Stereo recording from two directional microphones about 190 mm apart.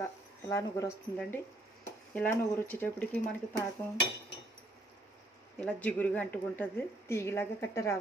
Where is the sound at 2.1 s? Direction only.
10° left (ahead or behind).